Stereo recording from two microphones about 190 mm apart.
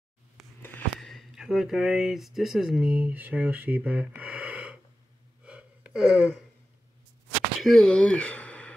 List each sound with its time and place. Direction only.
0.6 s speech: 5° left (ahead or behind)
5.4 s gasp: 5° right (ahead or behind)
7.6 s speech: 5° left (ahead or behind)